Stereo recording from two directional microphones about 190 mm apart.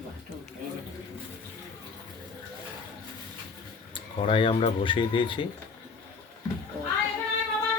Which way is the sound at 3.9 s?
25° left (ahead or behind).